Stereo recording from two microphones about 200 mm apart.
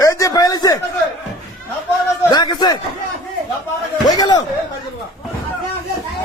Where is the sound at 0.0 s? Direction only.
15° left (ahead or behind).